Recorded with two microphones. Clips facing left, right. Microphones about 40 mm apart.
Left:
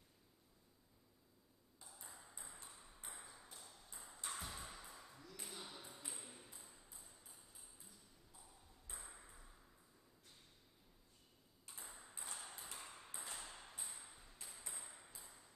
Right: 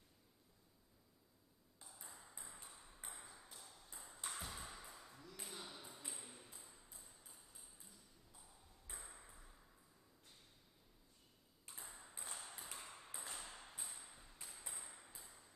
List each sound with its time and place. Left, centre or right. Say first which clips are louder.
1.9 s ping: even; centre
11.7 s ping: even; centre